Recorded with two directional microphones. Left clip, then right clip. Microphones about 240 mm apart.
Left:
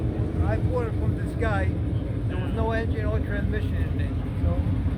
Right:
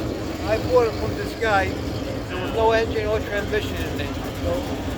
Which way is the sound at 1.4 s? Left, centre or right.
Centre.